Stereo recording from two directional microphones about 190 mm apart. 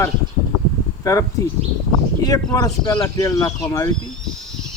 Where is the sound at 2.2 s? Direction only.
20° left (ahead or behind).